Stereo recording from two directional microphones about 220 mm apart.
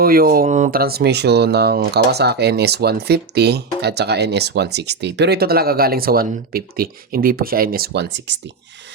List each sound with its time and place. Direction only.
0.0 s speech: 40° right (ahead or behind)